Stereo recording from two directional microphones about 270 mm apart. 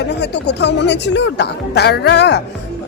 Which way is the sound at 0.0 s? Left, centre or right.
Left.